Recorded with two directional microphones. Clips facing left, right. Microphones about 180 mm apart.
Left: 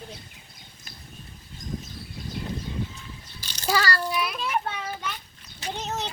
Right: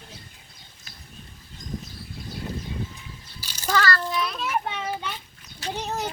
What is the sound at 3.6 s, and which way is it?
Child singing, 10° left (ahead or behind).